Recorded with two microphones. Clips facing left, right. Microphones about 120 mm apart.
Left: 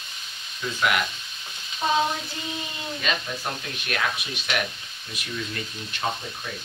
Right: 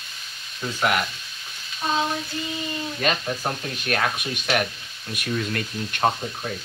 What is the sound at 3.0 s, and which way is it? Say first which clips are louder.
Speech: right 5 dB; 45° right (ahead or behind).